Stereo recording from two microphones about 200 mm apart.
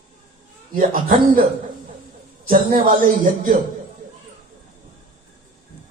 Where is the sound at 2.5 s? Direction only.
45° right (ahead or behind).